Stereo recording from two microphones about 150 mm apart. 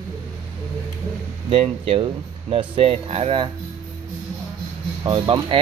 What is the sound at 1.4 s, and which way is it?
Speech, 35° right (ahead or behind).